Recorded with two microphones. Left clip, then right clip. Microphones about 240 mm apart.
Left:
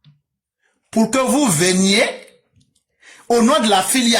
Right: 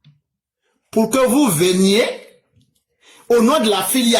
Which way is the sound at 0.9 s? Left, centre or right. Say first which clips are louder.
Right 2 dB; left.